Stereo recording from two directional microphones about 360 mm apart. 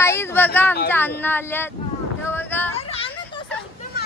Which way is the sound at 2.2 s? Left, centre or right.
Centre.